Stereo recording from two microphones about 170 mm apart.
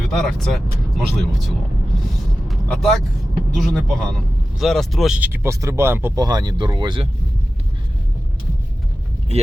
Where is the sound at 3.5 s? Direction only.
Centre (ahead or behind); by 7.1 s 25° right (ahead or behind).